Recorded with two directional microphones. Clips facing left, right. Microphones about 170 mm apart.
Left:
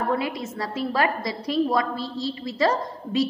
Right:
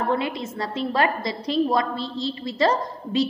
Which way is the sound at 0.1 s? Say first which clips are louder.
Right 1 dB; 25° right (ahead or behind).